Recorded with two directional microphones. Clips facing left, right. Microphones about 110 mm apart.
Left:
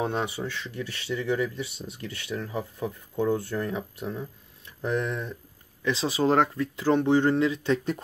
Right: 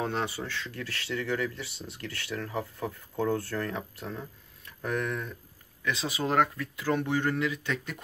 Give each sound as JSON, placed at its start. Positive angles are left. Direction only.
{"t": 0.0, "sound": "speech", "side_deg": 20}